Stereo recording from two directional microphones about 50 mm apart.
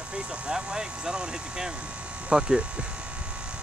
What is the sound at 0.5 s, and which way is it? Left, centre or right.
Speech, centre.